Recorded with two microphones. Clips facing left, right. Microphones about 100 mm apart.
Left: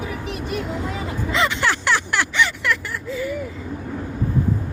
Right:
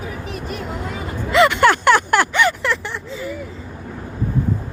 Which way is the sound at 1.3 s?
60° right (ahead or behind).